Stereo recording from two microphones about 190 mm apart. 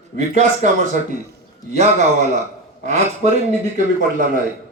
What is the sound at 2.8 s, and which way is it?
A man's voice, 35° right (ahead or behind).